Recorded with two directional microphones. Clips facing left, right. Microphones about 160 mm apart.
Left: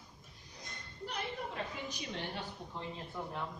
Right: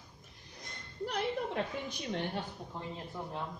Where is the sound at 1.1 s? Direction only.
60° right (ahead or behind).